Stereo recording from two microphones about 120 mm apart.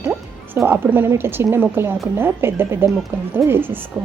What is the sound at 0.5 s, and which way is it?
A woman's voice, 20° right (ahead or behind).